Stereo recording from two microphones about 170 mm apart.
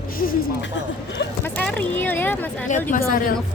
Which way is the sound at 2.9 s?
45° left (ahead or behind).